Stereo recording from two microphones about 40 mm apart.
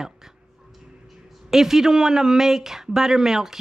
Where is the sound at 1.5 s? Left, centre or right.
Centre.